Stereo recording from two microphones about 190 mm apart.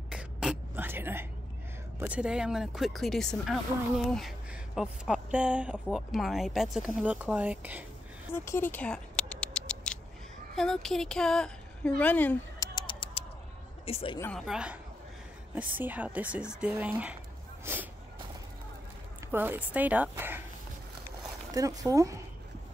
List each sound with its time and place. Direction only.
0.1 s throat clearing: 5° right (ahead or behind)
2.0 s speech: 5° right (ahead or behind)
8.5 s rodents: 10° left (ahead or behind)
10.5 s a woman's voice: centre (ahead or behind)
12.7 s bird: 25° left (ahead or behind)
13.8 s speech: 30° left (ahead or behind)
14.4 s speech: 5° right (ahead or behind)
19.3 s speech: 10° right (ahead or behind)
21.5 s speech: 15° right (ahead or behind)